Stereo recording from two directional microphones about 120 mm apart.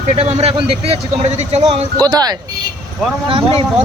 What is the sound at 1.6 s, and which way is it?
Speech, 35° right (ahead or behind).